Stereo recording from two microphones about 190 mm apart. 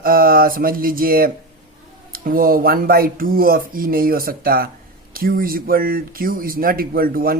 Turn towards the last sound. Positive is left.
turn(degrees=-50)  # may be behind; listen again after turning